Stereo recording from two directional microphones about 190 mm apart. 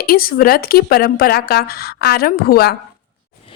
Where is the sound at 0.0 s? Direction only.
50° left (ahead or behind).